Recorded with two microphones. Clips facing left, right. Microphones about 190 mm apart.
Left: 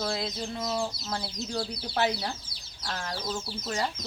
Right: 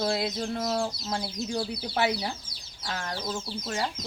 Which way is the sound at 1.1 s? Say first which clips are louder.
Right 3 dB; 15° right (ahead or behind).